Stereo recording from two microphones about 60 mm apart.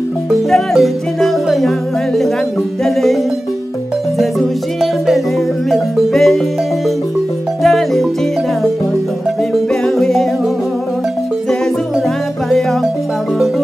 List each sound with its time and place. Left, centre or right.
0.3 s music: centre
2.8 s music: centre
5.7 s music: centre
7.6 s music: centre
9.5 s music: centre